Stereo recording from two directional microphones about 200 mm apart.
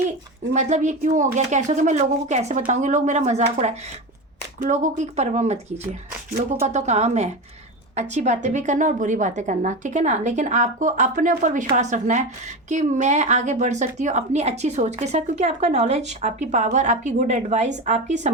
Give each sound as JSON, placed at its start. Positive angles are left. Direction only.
{"t": 0.5, "sound": "a woman's voice", "side_deg": -35}